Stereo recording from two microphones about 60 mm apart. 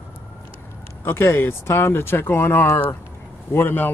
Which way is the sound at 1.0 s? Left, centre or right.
Left.